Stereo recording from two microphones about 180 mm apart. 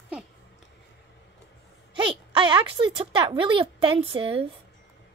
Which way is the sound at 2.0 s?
30° right (ahead or behind).